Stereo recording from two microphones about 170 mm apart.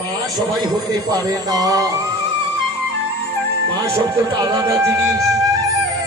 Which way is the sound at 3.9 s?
15° right (ahead or behind).